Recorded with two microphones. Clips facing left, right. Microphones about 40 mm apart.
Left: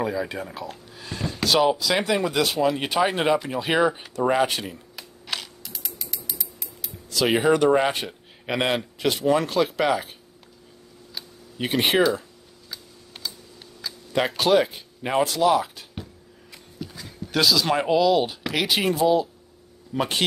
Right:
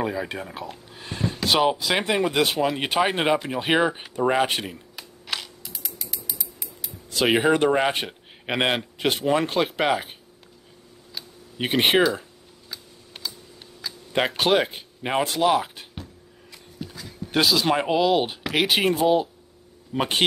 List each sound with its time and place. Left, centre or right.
0.0 s speech: right
0.9 s a sound: right
2.2 s speech: right
4.6 s typing: centre
7.2 s speech: centre
7.9 s speech: right
11.5 s speech: right
12.6 s typing: centre
14.1 s speech: right
16.8 s a sound: centre
17.3 s speech: right